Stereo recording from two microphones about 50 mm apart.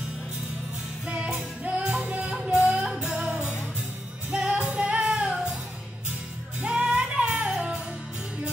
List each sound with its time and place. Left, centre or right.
1.0 s music: centre
2.0 s music: right
6.6 s music: centre